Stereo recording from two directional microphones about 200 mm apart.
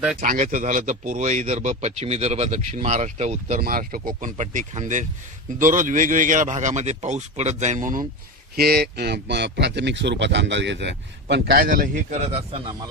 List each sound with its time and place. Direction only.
0.2 s speech: 40° right (ahead or behind)
3.6 s speech: 45° right (ahead or behind)
8.5 s speech: 50° right (ahead or behind); by 12.7 s 30° right (ahead or behind)